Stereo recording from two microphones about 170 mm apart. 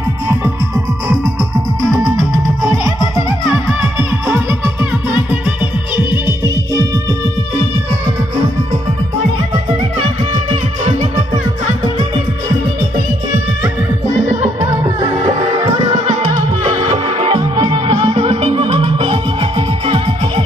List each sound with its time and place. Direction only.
0.3 s music: 10° right (ahead or behind)
2.0 s music: 20° right (ahead or behind)
5.9 s music: 15° right (ahead or behind)
10.5 s music: 35° right (ahead or behind)
14.6 s music: 20° right (ahead or behind)